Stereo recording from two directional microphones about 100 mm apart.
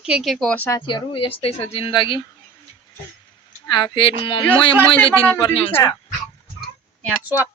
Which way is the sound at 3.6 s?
50° left (ahead or behind).